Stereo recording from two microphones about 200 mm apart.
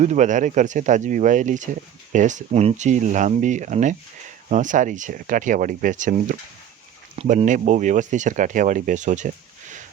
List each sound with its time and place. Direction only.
0.0 s speech: 35° right (ahead or behind)